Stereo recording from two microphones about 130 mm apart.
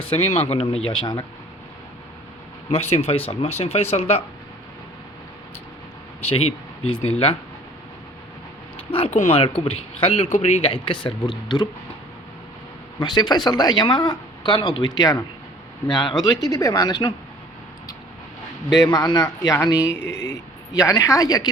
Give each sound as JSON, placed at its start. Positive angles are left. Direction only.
{"t": 0.1, "sound": "speech", "side_deg": 50}
{"t": 2.6, "sound": "speech", "side_deg": 55}
{"t": 6.2, "sound": "speech", "side_deg": 50}
{"t": 8.9, "sound": "speech", "side_deg": 45}
{"t": 10.3, "sound": "speech", "side_deg": 60}
{"t": 10.7, "sound": "speech", "side_deg": 40}
{"t": 13.0, "sound": "speech", "side_deg": 35}
{"t": 18.8, "sound": "speech", "side_deg": 30}
{"t": 19.7, "sound": "speech", "side_deg": -10}
{"t": 20.0, "sound": "speech", "side_deg": 25}